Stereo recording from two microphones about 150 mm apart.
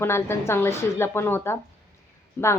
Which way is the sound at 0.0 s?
15° left (ahead or behind).